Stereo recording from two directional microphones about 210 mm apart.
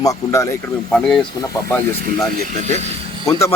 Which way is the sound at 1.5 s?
15° left (ahead or behind).